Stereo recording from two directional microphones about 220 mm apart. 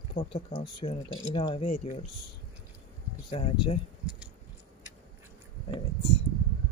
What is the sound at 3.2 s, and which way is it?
Speech, 20° left (ahead or behind).